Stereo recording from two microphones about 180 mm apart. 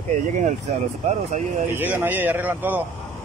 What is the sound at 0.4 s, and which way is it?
Speech, 45° right (ahead or behind).